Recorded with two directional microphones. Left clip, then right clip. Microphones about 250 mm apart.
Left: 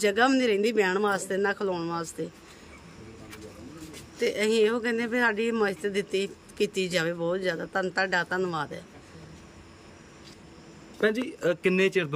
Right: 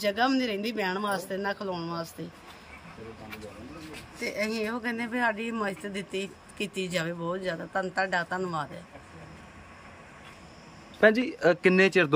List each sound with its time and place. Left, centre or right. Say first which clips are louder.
0.0 s speech: left 3 dB; centre
4.2 s speech: left 7 dB; centre
11.0 s speech: right 5 dB; centre